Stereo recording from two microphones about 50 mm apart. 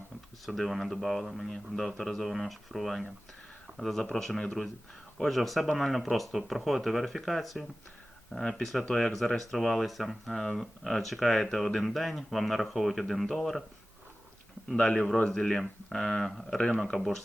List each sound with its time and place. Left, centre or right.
0.4 s speech: centre
14.8 s speech: centre